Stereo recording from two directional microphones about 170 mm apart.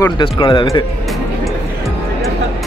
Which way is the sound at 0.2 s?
25° left (ahead or behind).